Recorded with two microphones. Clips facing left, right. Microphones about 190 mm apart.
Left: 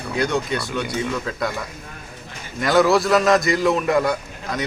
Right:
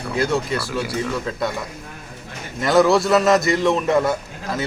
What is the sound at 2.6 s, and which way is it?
A man's voice, centre (ahead or behind).